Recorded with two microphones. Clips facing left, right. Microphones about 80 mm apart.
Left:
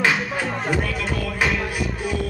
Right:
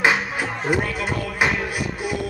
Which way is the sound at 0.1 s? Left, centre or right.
Centre.